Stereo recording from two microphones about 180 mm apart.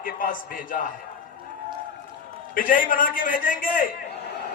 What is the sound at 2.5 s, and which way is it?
A man's voice, 50° left (ahead or behind).